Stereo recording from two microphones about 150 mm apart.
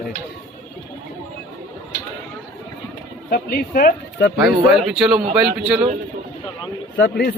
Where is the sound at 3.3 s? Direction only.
80° left.